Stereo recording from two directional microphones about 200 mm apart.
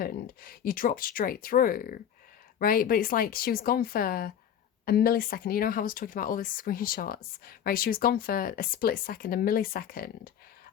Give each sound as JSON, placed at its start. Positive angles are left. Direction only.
{"t": 0.0, "sound": "speech", "side_deg": 45}